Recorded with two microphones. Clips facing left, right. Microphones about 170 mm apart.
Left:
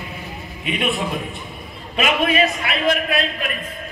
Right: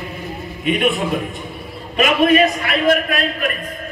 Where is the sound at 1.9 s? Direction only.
45° right (ahead or behind).